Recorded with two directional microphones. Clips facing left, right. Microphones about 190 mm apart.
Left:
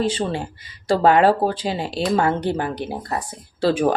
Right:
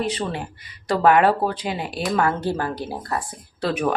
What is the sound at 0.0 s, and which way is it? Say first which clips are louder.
Speech: left 3 dB; 30° left (ahead or behind).